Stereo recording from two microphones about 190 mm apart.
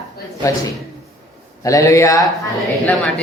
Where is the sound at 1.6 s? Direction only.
15° left (ahead or behind).